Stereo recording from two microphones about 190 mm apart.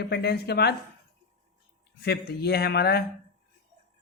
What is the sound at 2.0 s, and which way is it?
Speech, 55° left (ahead or behind).